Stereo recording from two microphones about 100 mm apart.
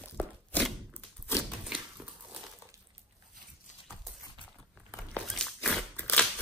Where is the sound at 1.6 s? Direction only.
10° right (ahead or behind).